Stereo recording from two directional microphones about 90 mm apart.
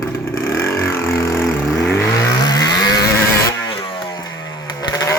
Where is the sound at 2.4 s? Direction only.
45° left (ahead or behind).